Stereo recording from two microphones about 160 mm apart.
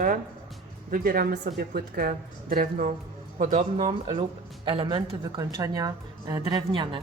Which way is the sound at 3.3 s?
50° right (ahead or behind).